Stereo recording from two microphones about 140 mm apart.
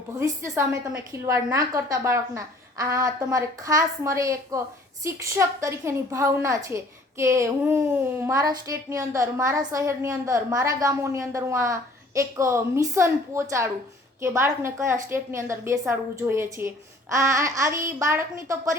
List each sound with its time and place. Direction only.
0.2 s a woman's voice: 20° right (ahead or behind)